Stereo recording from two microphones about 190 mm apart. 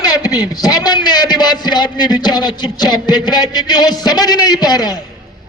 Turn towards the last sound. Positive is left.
turn(degrees=20)  # may be behind; listen again after turning